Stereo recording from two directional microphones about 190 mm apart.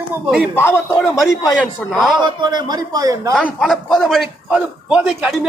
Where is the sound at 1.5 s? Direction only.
Centre (ahead or behind).